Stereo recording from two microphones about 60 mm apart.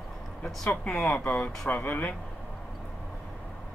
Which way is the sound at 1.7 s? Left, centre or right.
Left.